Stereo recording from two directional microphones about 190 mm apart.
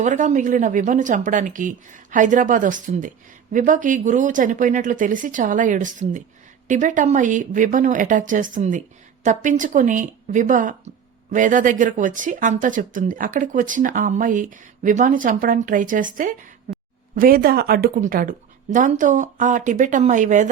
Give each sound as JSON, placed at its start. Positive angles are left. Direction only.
{"t": 0.0, "sound": "speech", "side_deg": -40}